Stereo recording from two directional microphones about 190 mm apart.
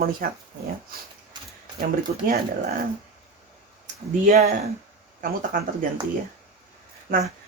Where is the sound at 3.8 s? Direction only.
50° right (ahead or behind).